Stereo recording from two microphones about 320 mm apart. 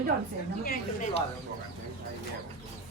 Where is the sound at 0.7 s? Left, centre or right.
Left.